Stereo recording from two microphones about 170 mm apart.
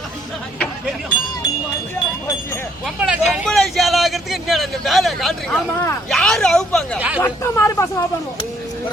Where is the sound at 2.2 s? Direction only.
15° left (ahead or behind).